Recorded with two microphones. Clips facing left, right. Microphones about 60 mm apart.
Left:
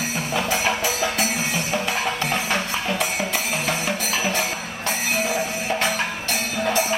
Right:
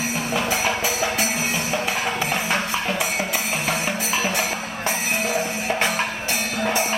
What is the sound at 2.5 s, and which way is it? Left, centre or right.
Music, centre.